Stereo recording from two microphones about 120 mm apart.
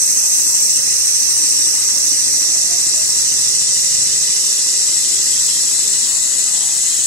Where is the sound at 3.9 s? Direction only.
10° left (ahead or behind).